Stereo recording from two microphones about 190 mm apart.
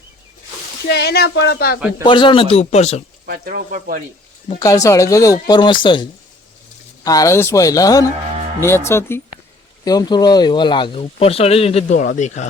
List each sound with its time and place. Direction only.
0.9 s speech: 60° left (ahead or behind)
2.0 s speech: 25° left (ahead or behind)
3.2 s speech: 50° right (ahead or behind)
4.6 s speech: 15° left (ahead or behind)
11.9 s speech: 45° left (ahead or behind)